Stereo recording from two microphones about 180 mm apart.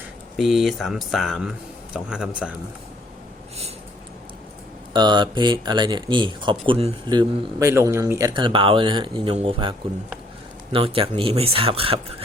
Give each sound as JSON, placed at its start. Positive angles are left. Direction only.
{"t": 0.3, "sound": "speech", "side_deg": 0}
{"t": 4.9, "sound": "speech", "side_deg": -25}